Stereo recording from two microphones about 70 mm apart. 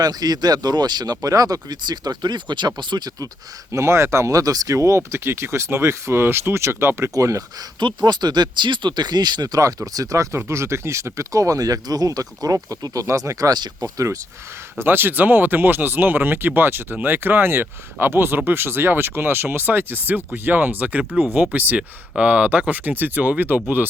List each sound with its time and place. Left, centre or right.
0.0 s speech: right
3.7 s speech: right
7.1 s speech: right
7.8 s speech: right
9.6 s speech: right
14.8 s speech: right